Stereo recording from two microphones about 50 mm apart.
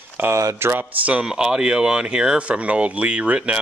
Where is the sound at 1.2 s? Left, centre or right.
Centre.